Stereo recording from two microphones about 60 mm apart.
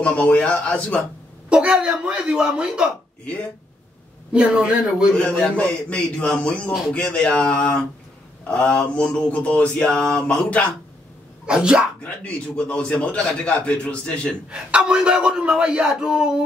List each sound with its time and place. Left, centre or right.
0.0 s a man's voice: left
1.5 s speech: centre
4.3 s speech: centre
5.1 s a man's voice: centre
11.4 s speech: centre
12.0 s a man's voice: centre
14.5 s speech: centre